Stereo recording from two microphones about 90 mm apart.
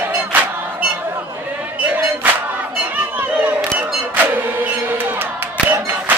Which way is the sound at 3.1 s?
20° right (ahead or behind).